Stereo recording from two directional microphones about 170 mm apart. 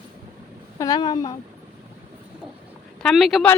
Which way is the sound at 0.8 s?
25° left (ahead or behind).